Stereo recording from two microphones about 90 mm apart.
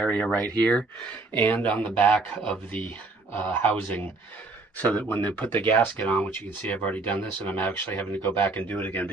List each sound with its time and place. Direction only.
0.0 s speech: 10° left (ahead or behind)